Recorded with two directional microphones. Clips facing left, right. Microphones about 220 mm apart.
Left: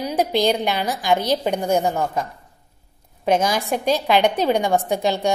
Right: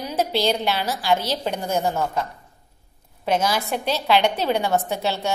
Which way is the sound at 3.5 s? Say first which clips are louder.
Left 4 dB; 45° left (ahead or behind).